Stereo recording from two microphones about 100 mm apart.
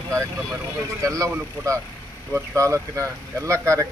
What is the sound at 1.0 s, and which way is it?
Speech, 35° right (ahead or behind).